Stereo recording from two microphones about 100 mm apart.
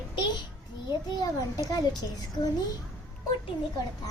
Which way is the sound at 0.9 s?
40° left (ahead or behind).